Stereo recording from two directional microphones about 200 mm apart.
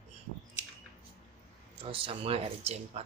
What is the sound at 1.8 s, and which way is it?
Speech, 25° right (ahead or behind).